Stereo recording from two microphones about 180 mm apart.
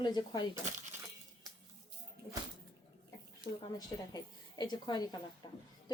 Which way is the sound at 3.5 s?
20° left (ahead or behind).